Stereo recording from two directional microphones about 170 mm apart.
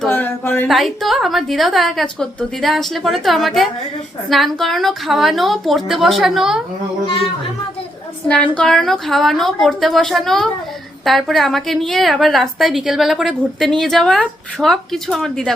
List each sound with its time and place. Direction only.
0.0 s a sound: 10° left (ahead or behind)
0.7 s a woman's voice: centre (ahead or behind)
8.3 s a woman's voice: 5° left (ahead or behind)